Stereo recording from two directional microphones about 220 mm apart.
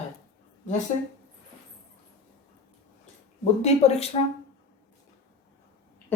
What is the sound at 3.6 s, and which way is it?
Speech, 30° left (ahead or behind).